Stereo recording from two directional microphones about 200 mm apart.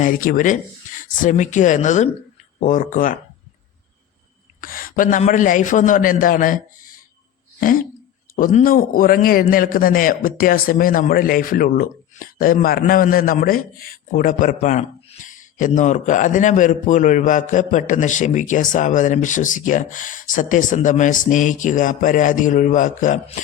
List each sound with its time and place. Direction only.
0.0 s a man's voice: 45° left (ahead or behind)
4.6 s a man's voice: 45° left (ahead or behind)
8.4 s a man's voice: 45° left (ahead or behind)